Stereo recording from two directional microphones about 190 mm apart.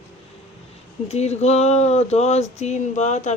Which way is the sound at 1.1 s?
35° left (ahead or behind).